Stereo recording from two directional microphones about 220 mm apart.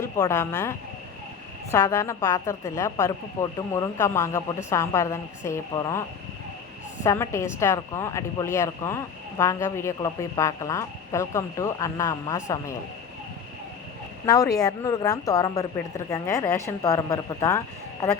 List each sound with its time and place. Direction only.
0.0 s a woman's voice: 15° left (ahead or behind)
14.3 s a woman's voice: 15° left (ahead or behind)